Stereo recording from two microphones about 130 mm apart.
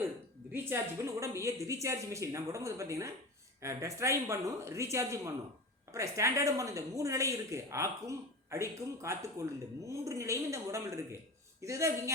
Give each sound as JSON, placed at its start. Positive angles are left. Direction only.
{"t": 0.5, "sound": "a woman's voice", "side_deg": -15}